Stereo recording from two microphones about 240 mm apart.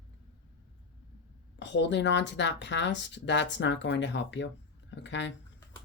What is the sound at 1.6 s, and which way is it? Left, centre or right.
Speech, left.